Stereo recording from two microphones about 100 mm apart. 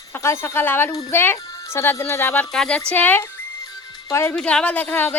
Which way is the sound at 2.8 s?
20° left (ahead or behind).